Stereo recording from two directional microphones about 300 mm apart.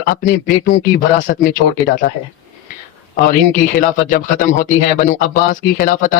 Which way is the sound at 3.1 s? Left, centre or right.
Left.